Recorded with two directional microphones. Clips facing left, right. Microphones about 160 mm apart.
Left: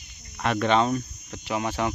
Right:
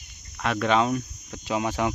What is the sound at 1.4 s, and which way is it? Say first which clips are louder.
Speech: right 1 dB; 15° right (ahead or behind).